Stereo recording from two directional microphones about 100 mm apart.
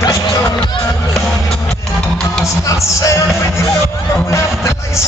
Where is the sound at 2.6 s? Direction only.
35° left (ahead or behind).